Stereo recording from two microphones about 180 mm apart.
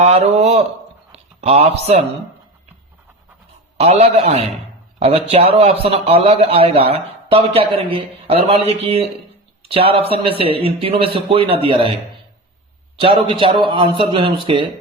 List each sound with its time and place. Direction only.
0.0 s a man's voice: 35° right (ahead or behind)
3.8 s a man's voice: 35° right (ahead or behind)
13.0 s a man's voice: 30° right (ahead or behind)